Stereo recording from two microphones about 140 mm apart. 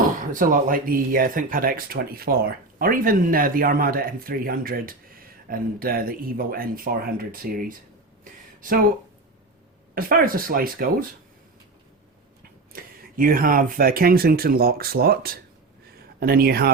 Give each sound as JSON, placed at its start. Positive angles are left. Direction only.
{"t": 0.2, "sound": "speech", "side_deg": -70}
{"t": 8.2, "sound": "a sound", "side_deg": -75}
{"t": 9.9, "sound": "speech", "side_deg": -90}
{"t": 12.7, "sound": "speech", "side_deg": -90}